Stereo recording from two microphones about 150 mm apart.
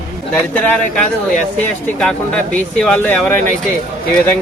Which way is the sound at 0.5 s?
10° left (ahead or behind).